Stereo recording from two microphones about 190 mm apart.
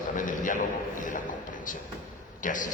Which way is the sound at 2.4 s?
45° left (ahead or behind).